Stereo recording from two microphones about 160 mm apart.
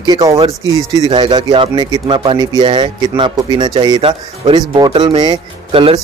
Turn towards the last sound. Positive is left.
turn(degrees=-35)  # may be behind; listen again after turning